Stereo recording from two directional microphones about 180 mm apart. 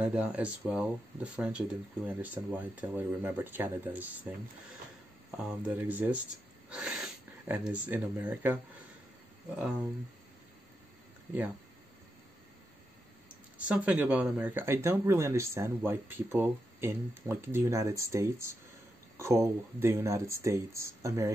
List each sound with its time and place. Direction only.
0.0 s speech: 5° right (ahead or behind)
5.4 s speech: 5° right (ahead or behind)
13.7 s speech: 5° right (ahead or behind)